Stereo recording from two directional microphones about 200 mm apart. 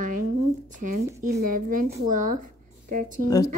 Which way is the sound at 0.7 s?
40° right (ahead or behind).